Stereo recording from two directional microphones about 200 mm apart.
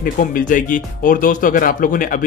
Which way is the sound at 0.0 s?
45° left (ahead or behind).